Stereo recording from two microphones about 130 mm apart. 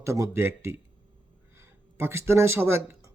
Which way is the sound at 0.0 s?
20° right (ahead or behind).